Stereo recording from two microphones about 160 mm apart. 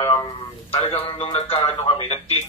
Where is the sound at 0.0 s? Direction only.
25° left (ahead or behind).